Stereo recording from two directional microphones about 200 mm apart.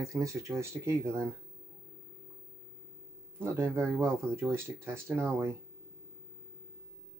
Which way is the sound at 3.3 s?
10° right (ahead or behind).